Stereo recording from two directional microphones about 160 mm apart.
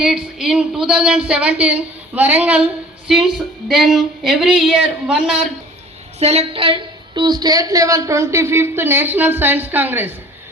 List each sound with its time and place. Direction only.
0.0 s speech: 5° right (ahead or behind)
6.1 s a woman's voice: 40° right (ahead or behind); by 10.2 s 10° right (ahead or behind)